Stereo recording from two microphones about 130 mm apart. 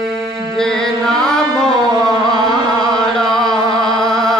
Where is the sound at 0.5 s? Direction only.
5° left (ahead or behind).